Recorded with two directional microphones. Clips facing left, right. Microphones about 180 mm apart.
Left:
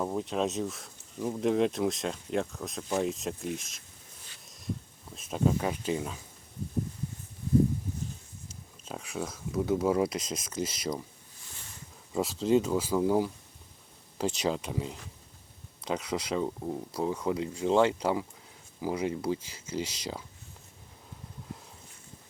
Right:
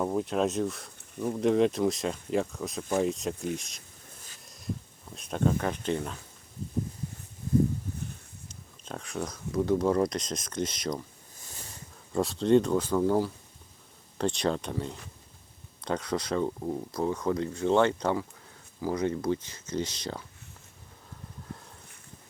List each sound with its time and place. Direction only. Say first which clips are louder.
0.0 s speech: right 3 dB; centre (ahead or behind)
4.4 s a sound: right 1 dB; centre (ahead or behind)
5.1 s speech: even; centre (ahead or behind)
8.4 s speech: right 1 dB; 5° left (ahead or behind)
11.3 s a sound: right 5 dB; 40° right (ahead or behind)
12.1 s speech: right 3 dB; 5° left (ahead or behind)